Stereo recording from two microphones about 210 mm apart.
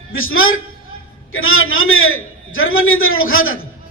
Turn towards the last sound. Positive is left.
turn(degrees=75)  # may be behind; listen again after turning